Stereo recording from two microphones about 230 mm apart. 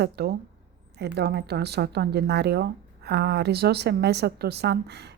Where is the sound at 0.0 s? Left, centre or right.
Right.